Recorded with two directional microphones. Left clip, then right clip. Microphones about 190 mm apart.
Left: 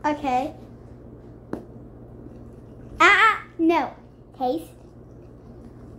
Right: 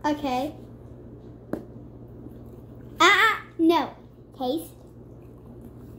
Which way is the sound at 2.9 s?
10° left (ahead or behind).